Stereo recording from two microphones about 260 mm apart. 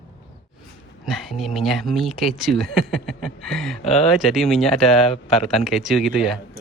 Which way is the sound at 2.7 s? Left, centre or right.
Right.